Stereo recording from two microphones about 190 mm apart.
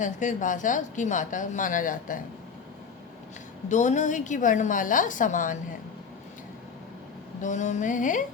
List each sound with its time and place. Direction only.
0.0 s a woman's voice: 40° left (ahead or behind)
3.7 s a woman's voice: 40° left (ahead or behind)
7.4 s a woman's voice: 40° left (ahead or behind)